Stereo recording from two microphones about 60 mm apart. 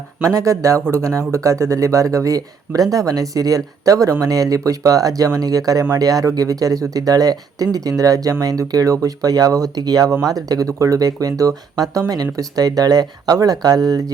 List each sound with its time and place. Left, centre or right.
0.2 s speech: right